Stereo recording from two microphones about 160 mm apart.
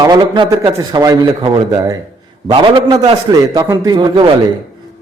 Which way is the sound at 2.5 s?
35° right (ahead or behind).